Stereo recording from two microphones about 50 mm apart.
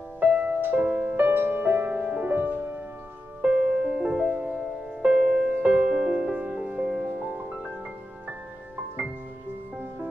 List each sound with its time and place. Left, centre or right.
0.3 s music: right
1.1 s music: right
3.4 s music: centre